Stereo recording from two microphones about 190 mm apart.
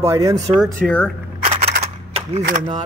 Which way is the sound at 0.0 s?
15° right (ahead or behind).